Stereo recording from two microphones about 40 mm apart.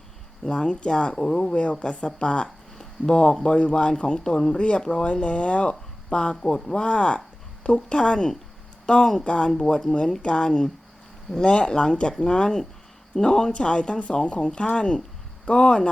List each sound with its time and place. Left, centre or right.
0.5 s speech: left
4.8 s speech: centre
5.0 s speech: left